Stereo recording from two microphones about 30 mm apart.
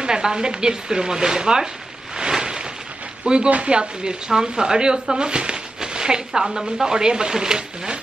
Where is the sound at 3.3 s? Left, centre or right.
Right.